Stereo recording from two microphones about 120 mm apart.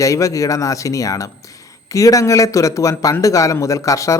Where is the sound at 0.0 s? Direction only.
25° left (ahead or behind).